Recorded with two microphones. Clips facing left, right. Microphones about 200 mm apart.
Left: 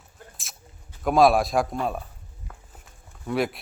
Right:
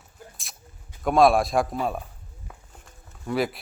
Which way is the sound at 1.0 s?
Centre (ahead or behind).